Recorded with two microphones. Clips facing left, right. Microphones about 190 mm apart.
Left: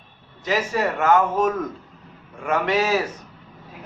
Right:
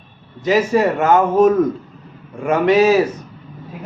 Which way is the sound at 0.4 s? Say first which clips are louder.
Right 8 dB; 20° right (ahead or behind).